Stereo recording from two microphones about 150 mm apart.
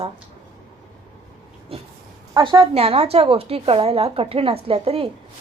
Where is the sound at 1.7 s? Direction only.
40° right (ahead or behind).